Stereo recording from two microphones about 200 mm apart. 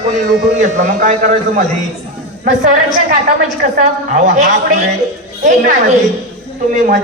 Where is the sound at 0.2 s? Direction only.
40° right (ahead or behind).